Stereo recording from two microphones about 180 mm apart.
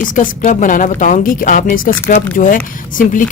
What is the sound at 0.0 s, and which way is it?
Speech, 50° left (ahead or behind).